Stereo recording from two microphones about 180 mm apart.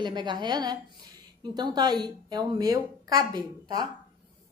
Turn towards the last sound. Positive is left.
turn(degrees=-20)  # may be behind; listen again after turning